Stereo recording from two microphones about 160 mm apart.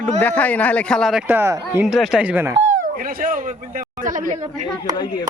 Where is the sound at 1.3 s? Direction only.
15° right (ahead or behind).